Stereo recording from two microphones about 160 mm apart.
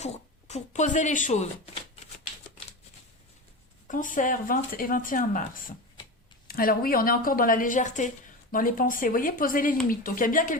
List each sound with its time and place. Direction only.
0.0 s speech: 45° left (ahead or behind)
3.8 s speech: 55° left (ahead or behind)